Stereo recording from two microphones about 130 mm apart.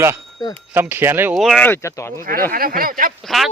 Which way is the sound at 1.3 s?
Centre (ahead or behind).